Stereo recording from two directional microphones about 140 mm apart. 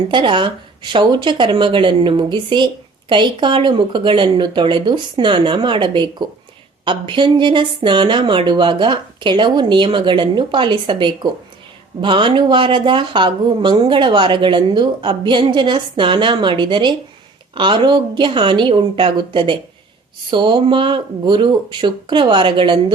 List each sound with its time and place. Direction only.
0.1 s speech: 35° right (ahead or behind)